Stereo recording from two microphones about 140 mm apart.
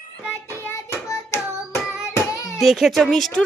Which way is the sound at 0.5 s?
20° left (ahead or behind).